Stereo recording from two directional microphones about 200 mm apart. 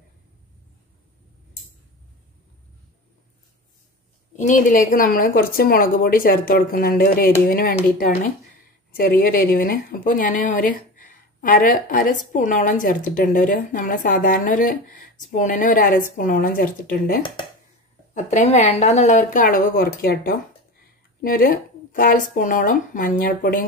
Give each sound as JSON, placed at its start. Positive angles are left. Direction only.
{"t": 4.4, "sound": "speech", "side_deg": 40}
{"t": 18.1, "sound": "speech", "side_deg": 35}